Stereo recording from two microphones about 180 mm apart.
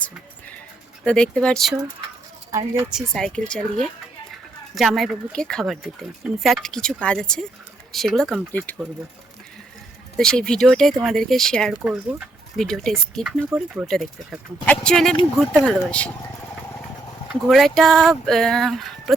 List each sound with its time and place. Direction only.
1.0 s speech: 5° left (ahead or behind)
2.5 s speech: 15° right (ahead or behind)
2.9 s speech: centre (ahead or behind)
10.2 s speech: 5° left (ahead or behind)
17.4 s speech: centre (ahead or behind)